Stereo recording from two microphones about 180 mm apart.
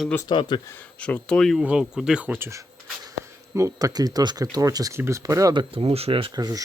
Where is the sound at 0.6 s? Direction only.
10° left (ahead or behind).